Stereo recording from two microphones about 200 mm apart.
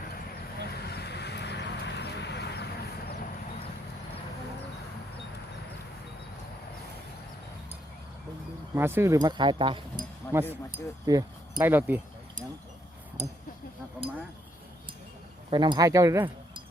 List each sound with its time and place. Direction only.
0.8 s vehicle: 55° left (ahead or behind)
8.7 s speech: 10° right (ahead or behind)
10.3 s speech: 10° right (ahead or behind)
15.4 s speech: 20° right (ahead or behind)